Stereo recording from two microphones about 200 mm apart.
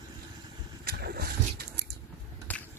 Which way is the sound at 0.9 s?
50° right (ahead or behind).